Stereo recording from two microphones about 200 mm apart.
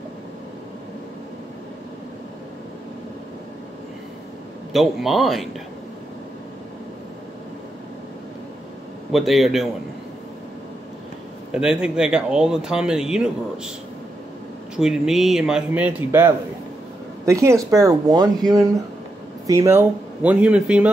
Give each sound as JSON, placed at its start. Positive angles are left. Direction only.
{"t": 4.7, "sound": "speech", "side_deg": 0}
{"t": 9.1, "sound": "speech", "side_deg": 0}
{"t": 11.5, "sound": "speech", "side_deg": -5}
{"t": 14.8, "sound": "speech", "side_deg": 0}